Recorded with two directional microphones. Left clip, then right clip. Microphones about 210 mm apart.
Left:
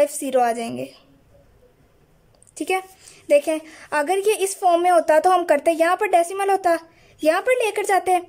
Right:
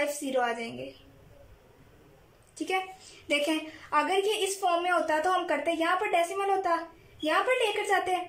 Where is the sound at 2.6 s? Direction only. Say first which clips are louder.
Left 7 dB; 20° left (ahead or behind).